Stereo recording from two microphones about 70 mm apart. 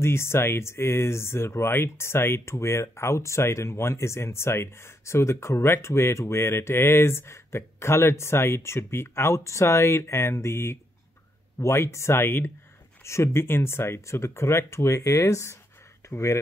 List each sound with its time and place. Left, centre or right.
0.0 s speech: left